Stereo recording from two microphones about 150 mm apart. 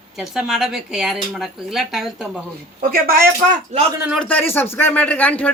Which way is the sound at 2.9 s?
75° right (ahead or behind).